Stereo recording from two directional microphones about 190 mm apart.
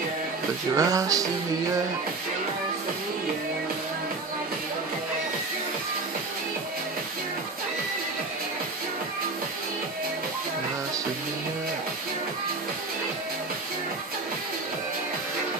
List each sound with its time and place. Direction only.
0.7 s music: 20° right (ahead or behind)